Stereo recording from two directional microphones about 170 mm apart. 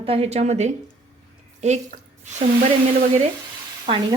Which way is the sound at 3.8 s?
30° right (ahead or behind).